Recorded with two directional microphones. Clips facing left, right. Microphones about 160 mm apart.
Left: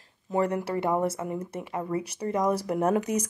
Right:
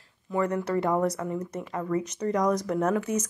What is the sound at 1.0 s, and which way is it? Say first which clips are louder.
Speech: right 1 dB; 25° left (ahead or behind).